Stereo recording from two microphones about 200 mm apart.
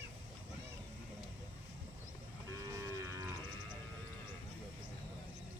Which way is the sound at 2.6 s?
15° right (ahead or behind).